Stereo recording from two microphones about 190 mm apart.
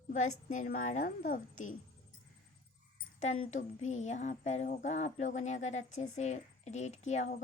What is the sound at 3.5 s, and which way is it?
Speech, 40° left (ahead or behind).